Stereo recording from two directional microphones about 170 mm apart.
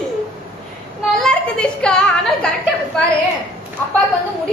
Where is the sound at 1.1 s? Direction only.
5° left (ahead or behind).